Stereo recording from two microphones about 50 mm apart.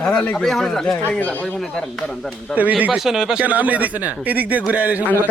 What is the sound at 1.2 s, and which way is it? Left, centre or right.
Speech, left.